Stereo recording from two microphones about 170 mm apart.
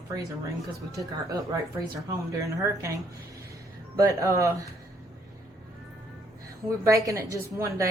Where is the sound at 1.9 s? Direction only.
20° right (ahead or behind).